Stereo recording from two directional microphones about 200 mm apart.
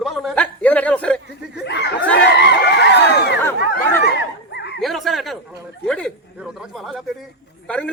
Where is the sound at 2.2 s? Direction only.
60° left (ahead or behind).